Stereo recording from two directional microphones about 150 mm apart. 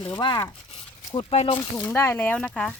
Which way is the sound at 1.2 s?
40° left (ahead or behind).